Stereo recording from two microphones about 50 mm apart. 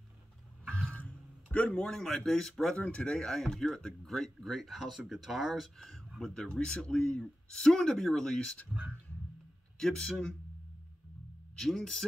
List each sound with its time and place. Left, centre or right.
1.5 s a man's voice: left
1.8 s speech: centre
2.9 s speech: centre
3.3 s speech: centre
8.7 s speech: right
9.8 s speech: centre
11.5 s speech: centre